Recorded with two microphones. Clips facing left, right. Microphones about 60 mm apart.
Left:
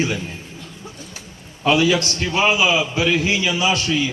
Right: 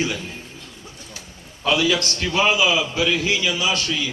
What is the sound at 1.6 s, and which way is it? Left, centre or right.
A man's voice, left.